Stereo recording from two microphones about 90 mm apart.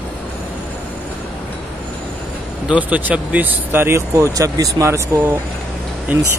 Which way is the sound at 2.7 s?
15° right (ahead or behind).